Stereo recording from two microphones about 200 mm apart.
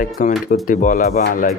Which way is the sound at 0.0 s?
45° left (ahead or behind).